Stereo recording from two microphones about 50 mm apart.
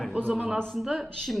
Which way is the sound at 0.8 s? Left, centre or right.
Centre.